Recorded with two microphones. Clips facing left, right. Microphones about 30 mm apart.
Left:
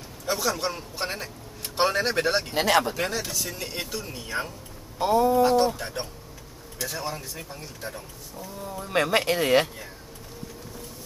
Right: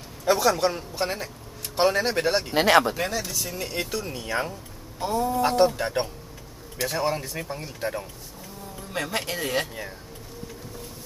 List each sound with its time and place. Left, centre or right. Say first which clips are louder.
0.2 s a man's voice: right 6 dB; centre
0.9 s a sound: right 3 dB; centre
1.8 s speech: right 1 dB; centre
2.5 s speech: right 5 dB; centre
3.0 s speech: even; centre
4.9 s a sound: left 5 dB; centre
5.8 s speech: right 7 dB; right
8.8 s speech: left 6 dB; left